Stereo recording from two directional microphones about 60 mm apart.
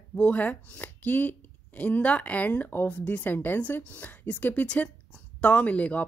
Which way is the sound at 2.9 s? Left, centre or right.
Left.